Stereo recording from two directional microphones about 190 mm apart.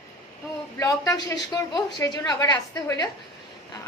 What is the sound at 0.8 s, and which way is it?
A woman's voice, 20° left (ahead or behind).